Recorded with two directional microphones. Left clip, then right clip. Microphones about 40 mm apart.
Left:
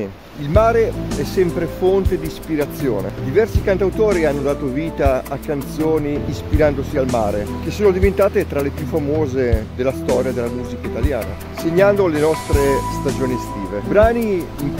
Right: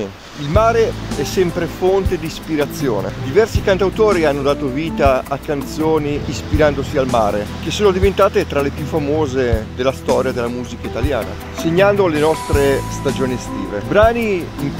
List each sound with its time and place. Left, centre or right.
0.6 s speech: left
2.9 s speech: centre
6.5 s speech: centre
7.8 s speech: centre
11.6 s speech: left
12.5 s speech: centre